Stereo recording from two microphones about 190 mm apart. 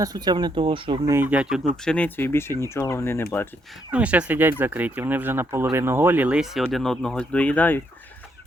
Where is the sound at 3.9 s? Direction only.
5° right (ahead or behind).